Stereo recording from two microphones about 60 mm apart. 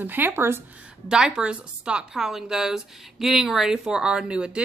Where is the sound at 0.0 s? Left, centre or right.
Right.